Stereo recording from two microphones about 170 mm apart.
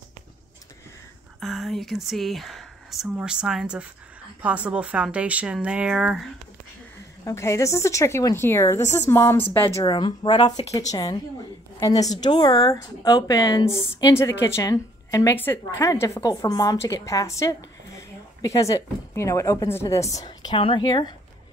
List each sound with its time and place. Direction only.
1.4 s speech: centre (ahead or behind)
7.2 s a woman's voice: 15° left (ahead or behind)